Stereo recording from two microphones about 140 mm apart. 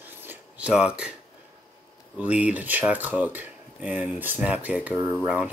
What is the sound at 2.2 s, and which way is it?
Speech, 10° right (ahead or behind).